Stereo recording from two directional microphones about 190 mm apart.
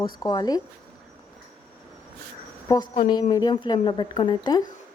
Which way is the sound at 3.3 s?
20° left (ahead or behind).